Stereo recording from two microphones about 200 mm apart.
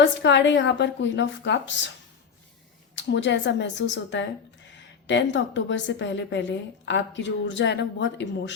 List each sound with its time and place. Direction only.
0.0 s a woman's voice: 65° left (ahead or behind)
2.9 s a woman's voice: 65° left (ahead or behind)